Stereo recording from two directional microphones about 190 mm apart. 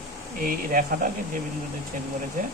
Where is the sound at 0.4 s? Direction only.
45° right (ahead or behind).